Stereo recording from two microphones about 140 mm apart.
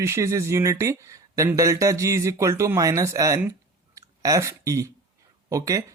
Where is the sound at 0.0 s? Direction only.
20° right (ahead or behind).